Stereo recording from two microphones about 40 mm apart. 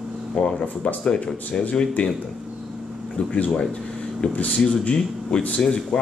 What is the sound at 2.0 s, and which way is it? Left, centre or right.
Speech, left.